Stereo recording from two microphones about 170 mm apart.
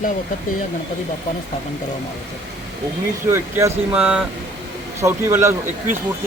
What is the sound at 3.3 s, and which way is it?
Speech, 15° right (ahead or behind).